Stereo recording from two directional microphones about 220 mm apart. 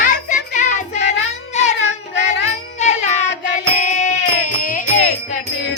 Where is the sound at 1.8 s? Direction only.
55° left (ahead or behind).